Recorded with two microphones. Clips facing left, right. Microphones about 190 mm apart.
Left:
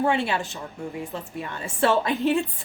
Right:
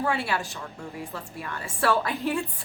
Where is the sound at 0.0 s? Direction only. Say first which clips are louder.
Left 4 dB; 20° left (ahead or behind).